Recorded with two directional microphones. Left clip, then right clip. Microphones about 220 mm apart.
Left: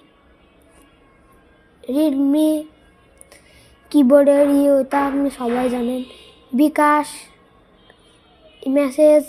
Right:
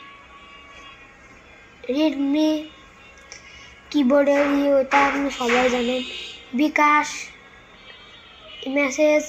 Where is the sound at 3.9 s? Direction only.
65° left (ahead or behind).